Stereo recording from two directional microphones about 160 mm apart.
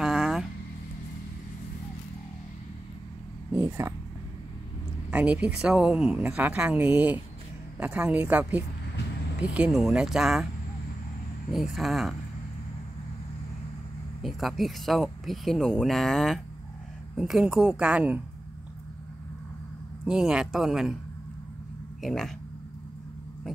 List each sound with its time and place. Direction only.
0.0 s a sound: 5° right (ahead or behind)
3.5 s speech: 15° right (ahead or behind)
5.1 s speech: 10° right (ahead or behind)
11.5 s speech: centre (ahead or behind)
14.2 s speech: centre (ahead or behind)
20.1 s speech: 5° right (ahead or behind)
22.0 s speech: centre (ahead or behind)